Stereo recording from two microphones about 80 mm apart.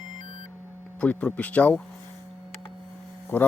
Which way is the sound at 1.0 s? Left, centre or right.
Centre.